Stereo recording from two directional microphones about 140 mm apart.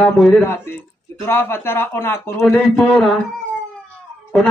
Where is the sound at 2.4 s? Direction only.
Centre (ahead or behind).